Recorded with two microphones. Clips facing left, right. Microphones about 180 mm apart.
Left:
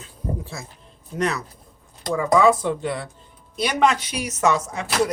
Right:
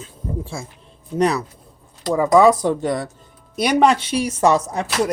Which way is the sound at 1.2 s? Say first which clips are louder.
Right 6 dB; 35° right (ahead or behind).